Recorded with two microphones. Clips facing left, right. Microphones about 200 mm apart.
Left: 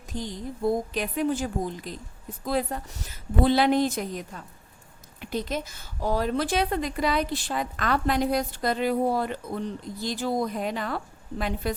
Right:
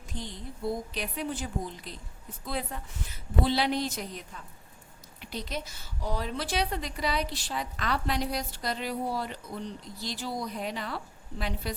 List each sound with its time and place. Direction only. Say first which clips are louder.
0.1 s a woman's voice: left 7 dB; 45° left (ahead or behind)